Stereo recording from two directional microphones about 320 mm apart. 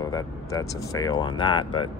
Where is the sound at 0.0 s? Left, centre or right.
Centre.